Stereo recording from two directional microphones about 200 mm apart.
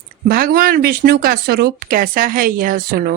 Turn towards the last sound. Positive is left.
turn(degrees=-50)  # may be behind; listen again after turning